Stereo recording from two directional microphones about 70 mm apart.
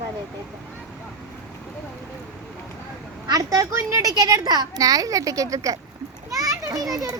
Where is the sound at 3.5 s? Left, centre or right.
Right.